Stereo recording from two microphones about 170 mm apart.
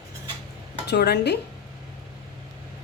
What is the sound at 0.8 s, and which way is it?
Speech, 75° left (ahead or behind).